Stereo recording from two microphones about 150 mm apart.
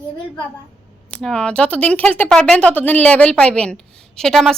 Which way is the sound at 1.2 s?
5° left (ahead or behind).